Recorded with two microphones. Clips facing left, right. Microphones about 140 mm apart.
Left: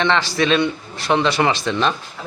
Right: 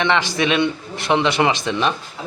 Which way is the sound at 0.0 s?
15° right (ahead or behind).